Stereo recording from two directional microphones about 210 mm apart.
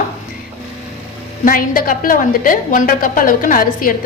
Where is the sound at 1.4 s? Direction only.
40° left (ahead or behind).